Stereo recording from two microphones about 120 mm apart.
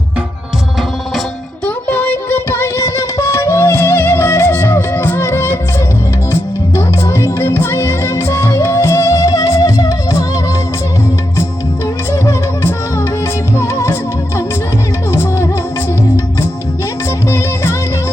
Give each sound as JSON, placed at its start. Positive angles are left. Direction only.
{"t": 1.6, "sound": "music", "side_deg": 15}
{"t": 12.1, "sound": "music", "side_deg": 25}
{"t": 15.1, "sound": "music", "side_deg": 20}
{"t": 17.2, "sound": "music", "side_deg": 25}